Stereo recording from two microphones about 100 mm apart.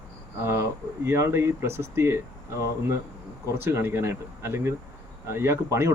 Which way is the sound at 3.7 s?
25° right (ahead or behind).